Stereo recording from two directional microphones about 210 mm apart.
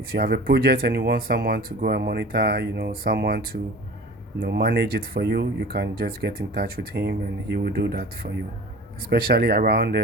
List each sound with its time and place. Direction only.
0.1 s speech: 45° right (ahead or behind)